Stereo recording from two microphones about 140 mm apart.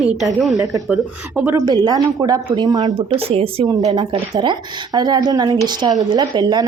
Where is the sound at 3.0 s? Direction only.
45° right (ahead or behind).